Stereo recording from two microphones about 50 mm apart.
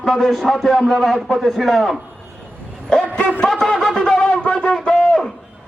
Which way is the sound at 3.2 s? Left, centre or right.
Left.